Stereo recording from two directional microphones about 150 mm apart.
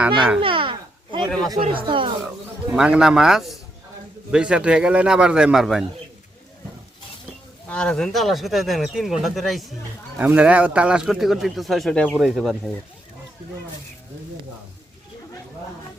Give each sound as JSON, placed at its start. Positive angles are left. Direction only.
{"t": 0.3, "sound": "a sound", "side_deg": -35}
{"t": 1.6, "sound": "speech", "side_deg": -35}
{"t": 2.7, "sound": "speech", "side_deg": -5}
{"t": 7.7, "sound": "speech", "side_deg": 5}
{"t": 10.2, "sound": "speech", "side_deg": -10}